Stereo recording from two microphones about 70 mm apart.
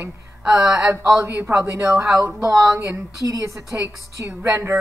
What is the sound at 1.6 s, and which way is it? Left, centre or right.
A woman's voice, right.